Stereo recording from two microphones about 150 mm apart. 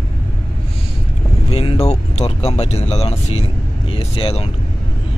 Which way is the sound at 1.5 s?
40° left (ahead or behind).